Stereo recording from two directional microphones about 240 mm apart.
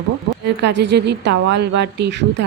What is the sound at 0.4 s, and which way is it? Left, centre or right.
A woman's voice, right.